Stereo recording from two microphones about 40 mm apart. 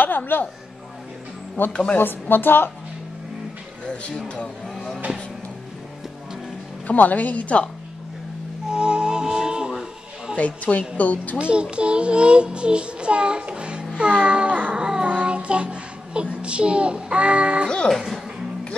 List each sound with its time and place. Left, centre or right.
0.0 s music: left
1.7 s speech: left
2.0 s a woman's voice: left
6.9 s a woman's voice: left
8.7 s music: right
10.3 s a woman's voice: left
11.3 s a child's voice: right
14.8 s child singing: right